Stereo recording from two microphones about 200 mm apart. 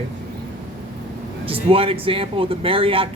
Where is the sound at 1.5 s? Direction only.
30° right (ahead or behind).